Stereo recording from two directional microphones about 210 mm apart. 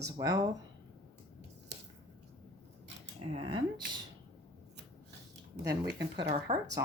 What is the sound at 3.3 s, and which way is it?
Speech, 25° right (ahead or behind).